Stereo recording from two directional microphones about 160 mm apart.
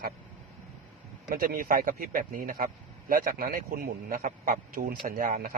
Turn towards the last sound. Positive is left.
turn(degrees=-60)  # may be behind; listen again after turning